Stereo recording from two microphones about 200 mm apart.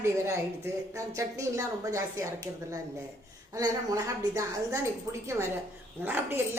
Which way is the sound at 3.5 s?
15° right (ahead or behind).